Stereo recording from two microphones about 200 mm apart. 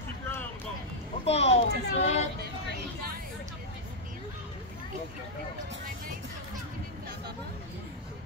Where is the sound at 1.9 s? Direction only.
35° left (ahead or behind).